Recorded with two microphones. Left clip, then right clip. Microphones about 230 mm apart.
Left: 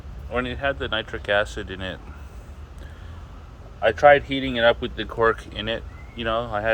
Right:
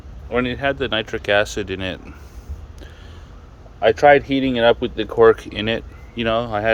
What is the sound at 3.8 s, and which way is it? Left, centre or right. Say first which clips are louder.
Speech: right 3 dB; right.